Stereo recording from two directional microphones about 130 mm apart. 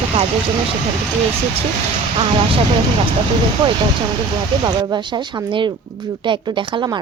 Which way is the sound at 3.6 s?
40° right (ahead or behind).